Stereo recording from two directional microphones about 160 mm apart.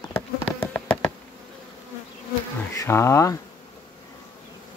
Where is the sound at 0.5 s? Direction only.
10° left (ahead or behind).